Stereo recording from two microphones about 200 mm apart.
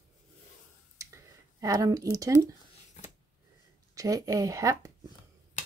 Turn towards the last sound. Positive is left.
turn(degrees=-15)  # may be behind; listen again after turning